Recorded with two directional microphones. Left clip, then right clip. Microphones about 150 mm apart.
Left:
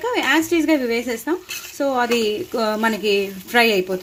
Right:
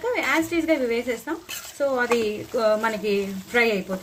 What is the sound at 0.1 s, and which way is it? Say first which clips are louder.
Speech: left 5 dB; 75° left (ahead or behind).